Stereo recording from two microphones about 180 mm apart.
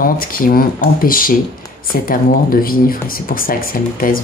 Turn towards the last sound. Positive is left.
turn(degrees=50)  # may be behind; listen again after turning